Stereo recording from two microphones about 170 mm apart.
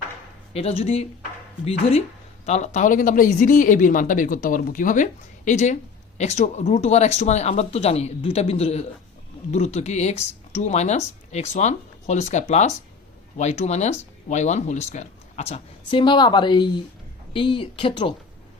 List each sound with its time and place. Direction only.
0.5 s speech: 35° left (ahead or behind)